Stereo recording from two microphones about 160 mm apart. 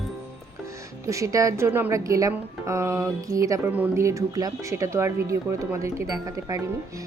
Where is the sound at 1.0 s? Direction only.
20° right (ahead or behind).